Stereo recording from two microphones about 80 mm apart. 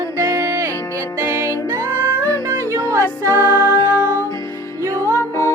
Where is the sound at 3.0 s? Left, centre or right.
Left.